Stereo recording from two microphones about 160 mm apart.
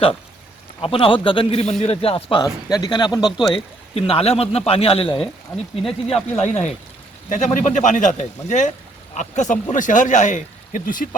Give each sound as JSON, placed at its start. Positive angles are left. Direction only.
{"t": 0.8, "sound": "a man's voice", "side_deg": 35}
{"t": 2.4, "sound": "speech", "side_deg": 25}
{"t": 3.2, "sound": "speech", "side_deg": 0}
{"t": 3.5, "sound": "a man's voice", "side_deg": 35}